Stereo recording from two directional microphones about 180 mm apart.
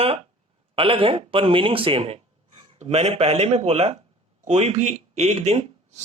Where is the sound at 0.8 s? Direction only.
30° right (ahead or behind).